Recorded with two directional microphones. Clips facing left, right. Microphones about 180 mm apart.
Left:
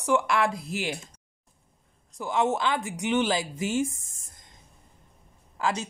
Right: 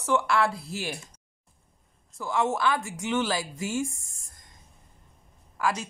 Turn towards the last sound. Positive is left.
turn(degrees=25)  # may be behind; listen again after turning